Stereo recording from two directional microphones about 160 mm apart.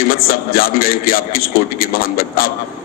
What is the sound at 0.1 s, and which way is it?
A man's voice, 65° left (ahead or behind).